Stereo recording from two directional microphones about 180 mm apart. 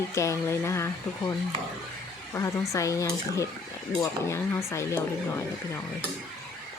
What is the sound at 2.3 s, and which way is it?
A woman's voice, 15° left (ahead or behind).